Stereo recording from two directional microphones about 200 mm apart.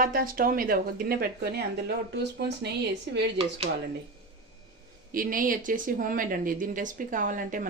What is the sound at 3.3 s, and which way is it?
Speech, 30° right (ahead or behind).